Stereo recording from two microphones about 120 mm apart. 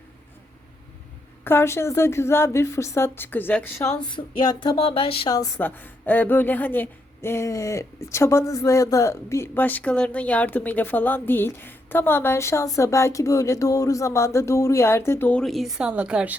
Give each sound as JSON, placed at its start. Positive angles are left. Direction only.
{"t": 1.5, "sound": "speech", "side_deg": 20}
{"t": 4.1, "sound": "a sound", "side_deg": 35}
{"t": 4.8, "sound": "speech", "side_deg": 50}
{"t": 5.5, "sound": "speech", "side_deg": 15}
{"t": 15.4, "sound": "speech", "side_deg": 0}